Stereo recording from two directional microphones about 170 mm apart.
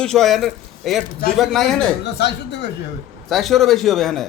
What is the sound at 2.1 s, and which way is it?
Speech, 90° left.